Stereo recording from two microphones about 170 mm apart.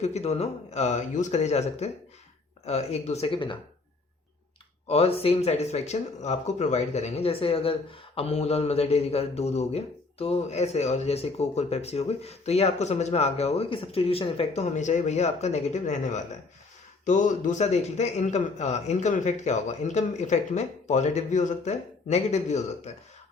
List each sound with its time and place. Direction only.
0.0 s speech: 40° left (ahead or behind)
4.9 s a man's voice: 35° left (ahead or behind)